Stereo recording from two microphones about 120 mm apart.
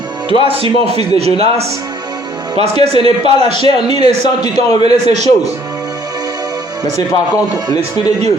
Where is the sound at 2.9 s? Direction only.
55° right (ahead or behind).